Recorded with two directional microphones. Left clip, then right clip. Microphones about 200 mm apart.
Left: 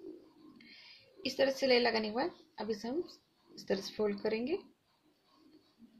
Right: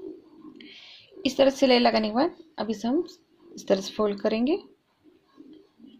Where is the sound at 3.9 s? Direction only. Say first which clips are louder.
Right 9 dB; 35° right (ahead or behind).